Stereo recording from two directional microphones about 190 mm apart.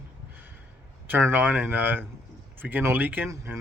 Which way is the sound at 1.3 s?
10° right (ahead or behind).